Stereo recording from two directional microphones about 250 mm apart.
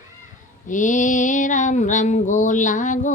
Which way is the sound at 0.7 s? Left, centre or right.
Left.